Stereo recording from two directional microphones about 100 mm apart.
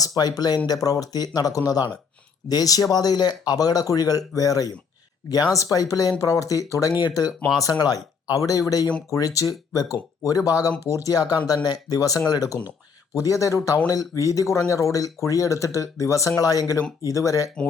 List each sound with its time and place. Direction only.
0.0 s speech: 40° left (ahead or behind)